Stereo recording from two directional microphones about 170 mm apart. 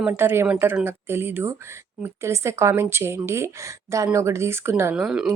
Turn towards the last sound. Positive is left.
turn(degrees=-5)  # may be behind; listen again after turning